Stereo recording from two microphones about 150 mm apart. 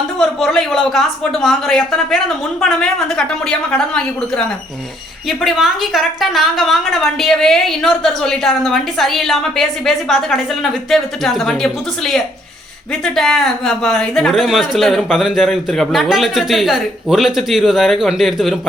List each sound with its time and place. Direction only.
0.2 s a woman's voice: centre (ahead or behind)